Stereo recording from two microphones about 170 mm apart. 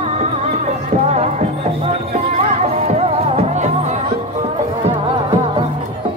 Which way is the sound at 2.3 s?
40° right (ahead or behind).